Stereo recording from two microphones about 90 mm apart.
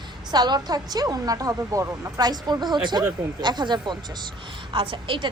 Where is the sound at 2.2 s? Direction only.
50° right (ahead or behind).